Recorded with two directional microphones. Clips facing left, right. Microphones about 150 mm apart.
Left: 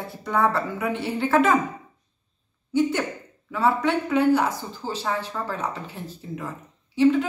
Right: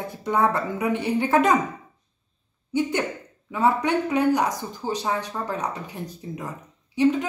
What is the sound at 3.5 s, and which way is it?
Speech, 15° right (ahead or behind).